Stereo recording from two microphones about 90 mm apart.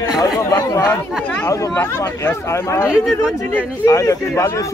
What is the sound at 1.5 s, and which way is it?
A man's voice, 35° left (ahead or behind).